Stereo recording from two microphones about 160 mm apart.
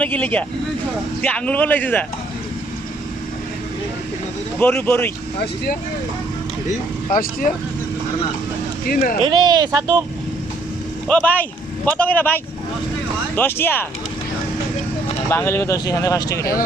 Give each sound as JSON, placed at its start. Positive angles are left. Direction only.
{"t": 0.0, "sound": "a man's voice", "side_deg": 10}
{"t": 4.6, "sound": "a man's voice", "side_deg": 5}
{"t": 7.1, "sound": "speech", "side_deg": 60}
{"t": 8.9, "sound": "speech", "side_deg": 65}
{"t": 9.2, "sound": "speech", "side_deg": -25}
{"t": 11.1, "sound": "a man's voice", "side_deg": 10}
{"t": 15.3, "sound": "speech", "side_deg": 15}